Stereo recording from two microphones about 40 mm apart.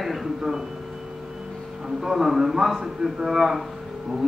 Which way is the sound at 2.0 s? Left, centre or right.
Centre.